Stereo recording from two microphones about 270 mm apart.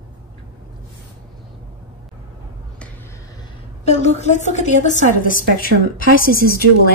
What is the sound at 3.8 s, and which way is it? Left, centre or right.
A woman's voice, left.